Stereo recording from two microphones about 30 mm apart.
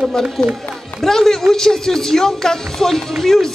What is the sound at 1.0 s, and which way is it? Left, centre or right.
Speech, centre.